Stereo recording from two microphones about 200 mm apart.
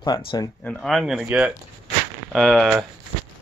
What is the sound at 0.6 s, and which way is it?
Speech, 5° left (ahead or behind).